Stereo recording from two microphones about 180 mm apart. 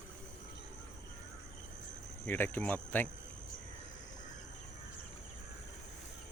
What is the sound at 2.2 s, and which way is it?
Speech, 10° left (ahead or behind).